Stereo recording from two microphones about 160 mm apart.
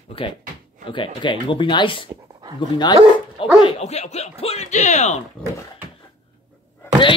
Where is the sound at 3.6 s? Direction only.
45° left (ahead or behind).